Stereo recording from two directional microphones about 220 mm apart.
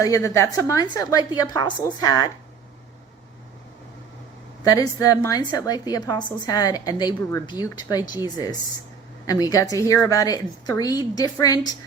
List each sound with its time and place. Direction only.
0.3 s a woman's voice: 15° left (ahead or behind)
4.6 s a woman's voice: 15° left (ahead or behind)